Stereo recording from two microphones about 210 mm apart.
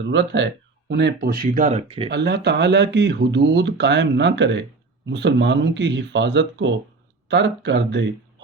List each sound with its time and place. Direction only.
0.0 s speech: 60° right (ahead or behind); by 2.0 s 30° right (ahead or behind)
2.0 s speech: 55° right (ahead or behind)